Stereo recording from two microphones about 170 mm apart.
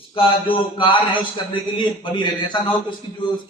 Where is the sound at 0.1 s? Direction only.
30° left (ahead or behind).